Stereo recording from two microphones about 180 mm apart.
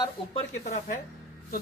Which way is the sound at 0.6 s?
45° left (ahead or behind).